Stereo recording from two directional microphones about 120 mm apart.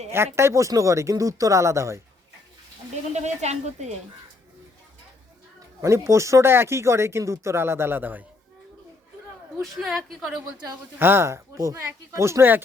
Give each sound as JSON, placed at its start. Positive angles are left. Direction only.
{"t": 0.3, "sound": "speech", "side_deg": -25}
{"t": 2.9, "sound": "speech", "side_deg": -70}
{"t": 5.5, "sound": "speech", "side_deg": -25}
{"t": 9.6, "sound": "a woman's voice", "side_deg": 0}
{"t": 11.0, "sound": "speech", "side_deg": -20}